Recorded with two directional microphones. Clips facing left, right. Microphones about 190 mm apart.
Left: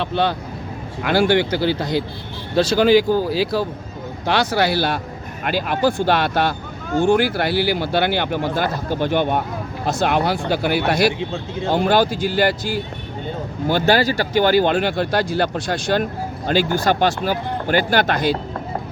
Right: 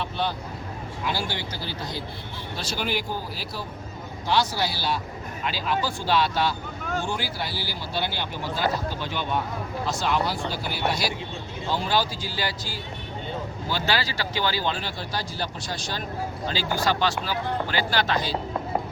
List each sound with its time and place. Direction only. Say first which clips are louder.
0.0 s speech: left 8 dB; 85° left
1.0 s speech: left 14 dB; 65° left (ahead or behind)
2.6 s speech: left 16 dB; 90° left
4.3 s speech: left 7 dB; 65° left (ahead or behind)